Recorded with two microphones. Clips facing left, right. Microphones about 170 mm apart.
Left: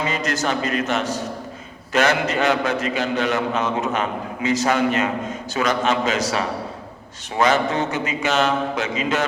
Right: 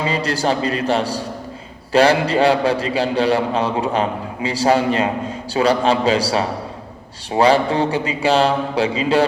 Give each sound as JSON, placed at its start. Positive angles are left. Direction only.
{"t": 0.0, "sound": "a man's voice", "side_deg": -30}